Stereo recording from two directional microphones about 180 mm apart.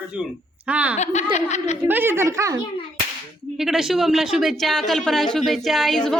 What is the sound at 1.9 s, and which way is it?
Speech, 10° right (ahead or behind).